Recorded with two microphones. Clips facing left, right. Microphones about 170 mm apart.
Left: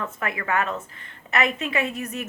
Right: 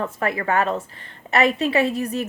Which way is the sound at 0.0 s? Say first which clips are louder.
Right 6 dB; 35° right (ahead or behind).